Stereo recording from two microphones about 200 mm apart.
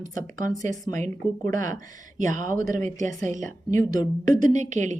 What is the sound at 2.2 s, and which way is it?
Speech, 40° right (ahead or behind).